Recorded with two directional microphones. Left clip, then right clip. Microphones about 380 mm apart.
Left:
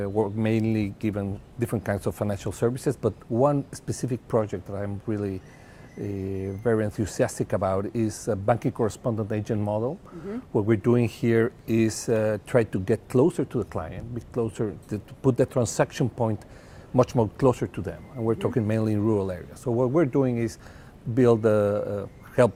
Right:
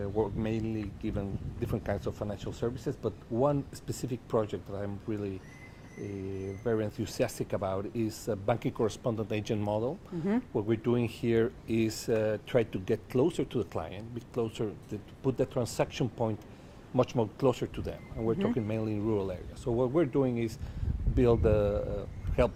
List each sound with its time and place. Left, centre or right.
0.0 s speech: left
6.7 s speech: left
10.5 s speech: left